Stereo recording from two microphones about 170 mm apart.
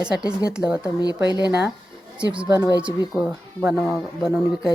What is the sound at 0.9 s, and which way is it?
Speech, 25° left (ahead or behind).